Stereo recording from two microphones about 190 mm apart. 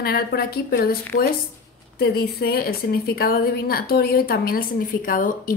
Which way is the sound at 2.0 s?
55° left (ahead or behind).